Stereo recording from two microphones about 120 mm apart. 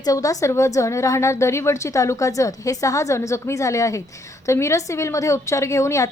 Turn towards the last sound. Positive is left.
turn(degrees=25)  # may be behind; listen again after turning